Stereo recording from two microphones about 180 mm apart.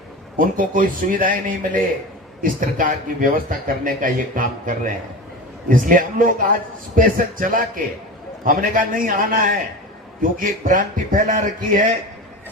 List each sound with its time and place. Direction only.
0.3 s speech: 50° right (ahead or behind)